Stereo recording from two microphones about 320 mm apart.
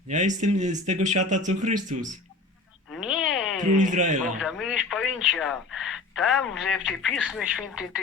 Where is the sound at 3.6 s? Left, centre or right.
Right.